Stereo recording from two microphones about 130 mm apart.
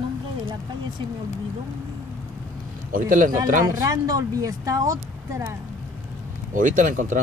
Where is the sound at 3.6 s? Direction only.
25° right (ahead or behind).